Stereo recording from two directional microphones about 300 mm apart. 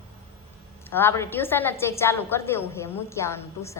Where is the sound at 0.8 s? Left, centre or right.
Centre.